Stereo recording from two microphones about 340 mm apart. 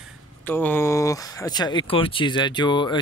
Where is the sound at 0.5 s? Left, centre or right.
Centre.